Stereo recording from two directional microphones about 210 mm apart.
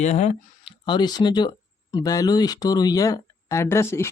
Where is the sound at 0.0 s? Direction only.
35° left (ahead or behind).